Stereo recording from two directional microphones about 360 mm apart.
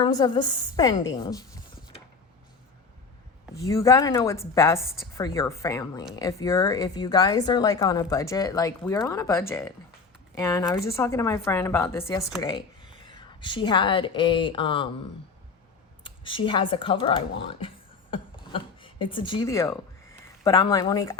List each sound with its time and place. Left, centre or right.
0.0 s speech: centre
3.7 s speech: centre
16.0 s speech: centre